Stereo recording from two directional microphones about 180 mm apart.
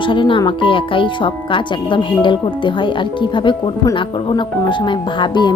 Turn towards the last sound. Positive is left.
turn(degrees=25)  # may be behind; listen again after turning